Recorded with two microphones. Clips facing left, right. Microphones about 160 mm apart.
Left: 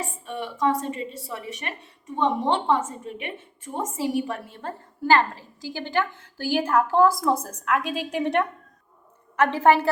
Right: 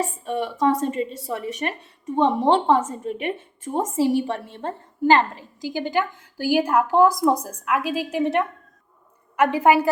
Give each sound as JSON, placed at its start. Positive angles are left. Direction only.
{"t": 0.3, "sound": "a woman's voice", "side_deg": -40}